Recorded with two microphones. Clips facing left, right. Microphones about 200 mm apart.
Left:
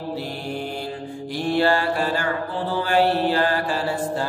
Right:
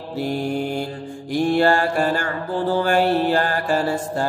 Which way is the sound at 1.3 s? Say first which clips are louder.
Right 3 dB; 50° right (ahead or behind).